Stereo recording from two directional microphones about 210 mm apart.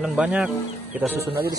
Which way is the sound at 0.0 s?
5° right (ahead or behind).